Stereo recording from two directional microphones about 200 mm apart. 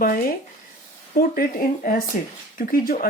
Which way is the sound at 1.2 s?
45° left (ahead or behind).